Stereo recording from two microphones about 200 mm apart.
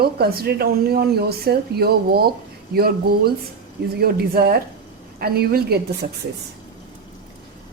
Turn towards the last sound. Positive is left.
turn(degrees=-50)  # may be behind; listen again after turning